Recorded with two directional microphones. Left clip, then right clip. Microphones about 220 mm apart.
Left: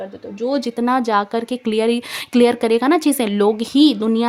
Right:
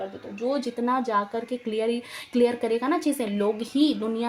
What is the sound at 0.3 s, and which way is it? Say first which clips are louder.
Speech: left 7 dB; 50° left (ahead or behind).